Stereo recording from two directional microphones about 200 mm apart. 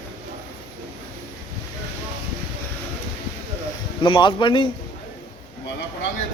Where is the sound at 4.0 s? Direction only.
25° left (ahead or behind).